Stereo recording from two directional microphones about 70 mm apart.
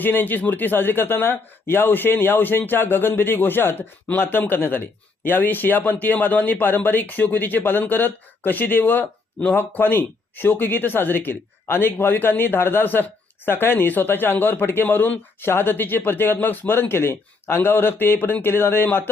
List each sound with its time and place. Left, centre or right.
0.0 s speech: left